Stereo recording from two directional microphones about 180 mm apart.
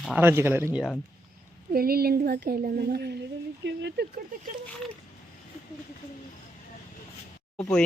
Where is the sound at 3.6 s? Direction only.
75° right (ahead or behind).